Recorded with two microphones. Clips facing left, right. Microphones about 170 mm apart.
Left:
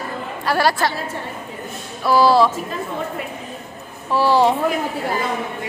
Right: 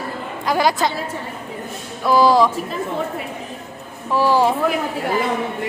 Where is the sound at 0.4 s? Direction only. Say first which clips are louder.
Right 1 dB; 15° right (ahead or behind).